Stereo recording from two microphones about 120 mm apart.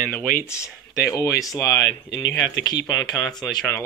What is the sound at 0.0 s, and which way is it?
Speech, 15° left (ahead or behind).